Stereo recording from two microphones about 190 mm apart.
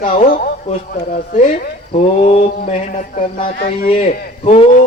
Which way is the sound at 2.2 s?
35° left (ahead or behind).